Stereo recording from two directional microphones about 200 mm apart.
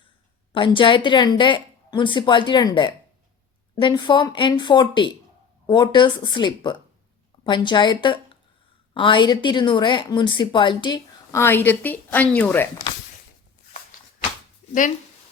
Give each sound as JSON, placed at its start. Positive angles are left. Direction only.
{"t": 0.5, "sound": "a woman's voice", "side_deg": 25}
{"t": 14.7, "sound": "speech", "side_deg": 40}